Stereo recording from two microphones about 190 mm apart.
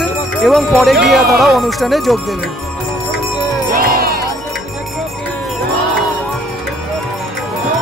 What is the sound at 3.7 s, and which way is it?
Music, 50° right (ahead or behind).